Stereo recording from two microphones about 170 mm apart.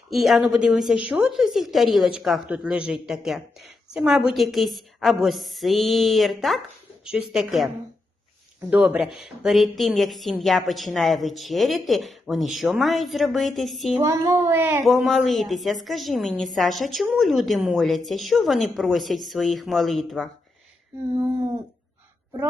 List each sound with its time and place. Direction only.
0.1 s a woman's voice: centre (ahead or behind)
8.7 s a woman's voice: 10° right (ahead or behind)
14.0 s speech: 20° right (ahead or behind)
14.8 s a woman's voice: centre (ahead or behind)